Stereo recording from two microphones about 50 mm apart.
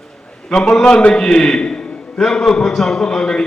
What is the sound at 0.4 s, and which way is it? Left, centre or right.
A man's voice, centre.